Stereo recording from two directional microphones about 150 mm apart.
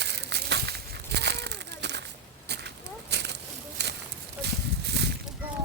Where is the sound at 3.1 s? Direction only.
90° right.